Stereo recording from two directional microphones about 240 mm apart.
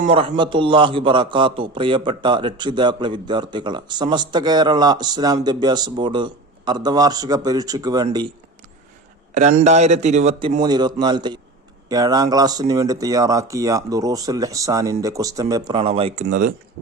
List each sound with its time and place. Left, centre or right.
0.0 s a man's voice: right
9.3 s a man's voice: right
10.6 s a man's voice: centre; by 16.6 s right